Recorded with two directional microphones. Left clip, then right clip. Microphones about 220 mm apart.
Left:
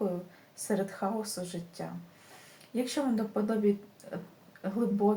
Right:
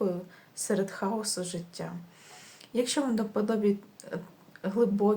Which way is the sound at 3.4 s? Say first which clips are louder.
Right 4 dB; 40° right (ahead or behind).